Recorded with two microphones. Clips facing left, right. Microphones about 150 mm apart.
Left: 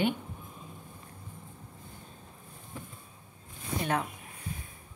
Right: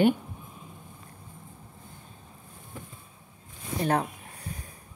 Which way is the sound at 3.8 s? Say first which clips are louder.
Right 5 dB; 35° right (ahead or behind).